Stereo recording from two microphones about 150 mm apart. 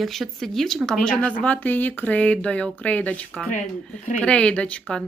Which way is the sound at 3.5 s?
55° left (ahead or behind).